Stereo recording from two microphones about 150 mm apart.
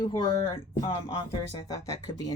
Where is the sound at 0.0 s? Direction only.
25° left (ahead or behind).